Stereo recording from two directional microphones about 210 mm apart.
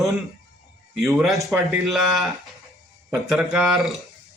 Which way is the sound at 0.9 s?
10° right (ahead or behind).